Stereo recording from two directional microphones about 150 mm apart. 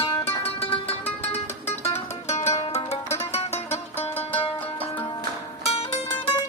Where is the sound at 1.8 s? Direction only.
45° left (ahead or behind).